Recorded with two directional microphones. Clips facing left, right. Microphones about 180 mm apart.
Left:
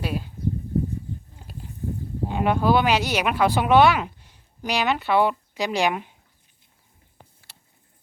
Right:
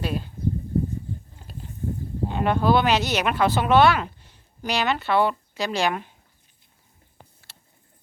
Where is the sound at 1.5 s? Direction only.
10° left (ahead or behind).